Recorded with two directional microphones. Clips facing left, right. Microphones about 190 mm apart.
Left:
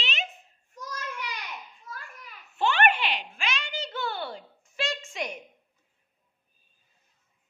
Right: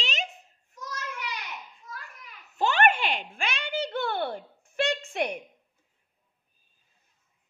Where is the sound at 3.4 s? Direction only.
55° right (ahead or behind).